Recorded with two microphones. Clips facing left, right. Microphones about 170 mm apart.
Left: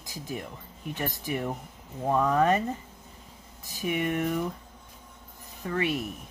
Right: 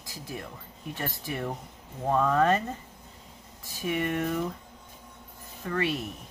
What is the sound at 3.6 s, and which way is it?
Speech, 15° left (ahead or behind).